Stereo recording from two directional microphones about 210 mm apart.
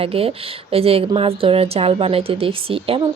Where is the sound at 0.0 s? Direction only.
25° right (ahead or behind).